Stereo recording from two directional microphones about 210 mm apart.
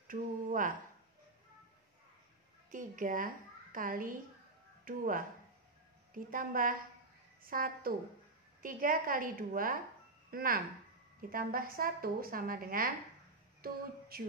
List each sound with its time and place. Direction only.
0.1 s speech: 40° right (ahead or behind)
2.7 s a woman's voice: 40° right (ahead or behind)
13.6 s music: 45° right (ahead or behind)